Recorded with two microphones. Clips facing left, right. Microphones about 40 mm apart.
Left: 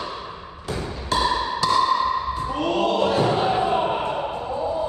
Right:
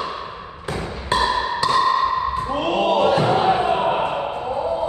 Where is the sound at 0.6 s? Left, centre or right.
Right.